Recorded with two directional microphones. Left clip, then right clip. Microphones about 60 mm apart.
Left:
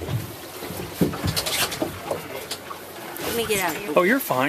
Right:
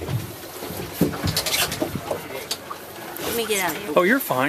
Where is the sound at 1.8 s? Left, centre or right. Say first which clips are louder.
Right 1 dB; centre.